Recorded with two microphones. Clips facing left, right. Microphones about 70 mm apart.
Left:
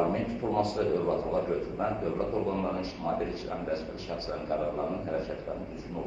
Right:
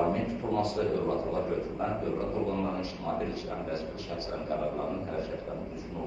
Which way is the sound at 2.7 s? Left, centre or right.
Left.